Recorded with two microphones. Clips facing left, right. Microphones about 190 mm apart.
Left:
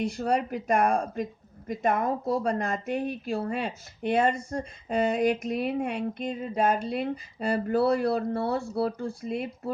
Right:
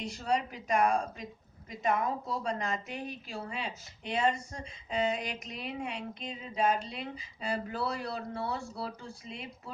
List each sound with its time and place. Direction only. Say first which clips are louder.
0.0 s speech: left 6 dB; 55° left (ahead or behind)